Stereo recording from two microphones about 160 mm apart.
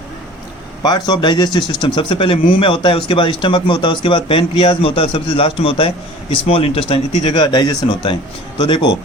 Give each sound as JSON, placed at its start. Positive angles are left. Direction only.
{"t": 0.8, "sound": "a man's voice", "side_deg": 25}